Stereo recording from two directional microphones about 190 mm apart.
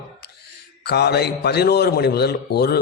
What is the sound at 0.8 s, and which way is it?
A man's voice, 60° left (ahead or behind).